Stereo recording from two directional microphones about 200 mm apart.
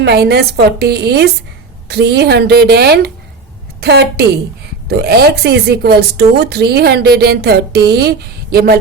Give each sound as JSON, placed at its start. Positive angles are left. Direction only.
{"t": 0.0, "sound": "a woman's voice", "side_deg": -55}